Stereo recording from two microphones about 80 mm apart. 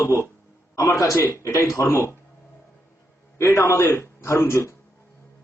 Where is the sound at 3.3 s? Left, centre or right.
Left.